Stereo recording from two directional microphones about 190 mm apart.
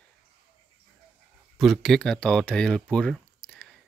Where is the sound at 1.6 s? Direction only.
Centre (ahead or behind).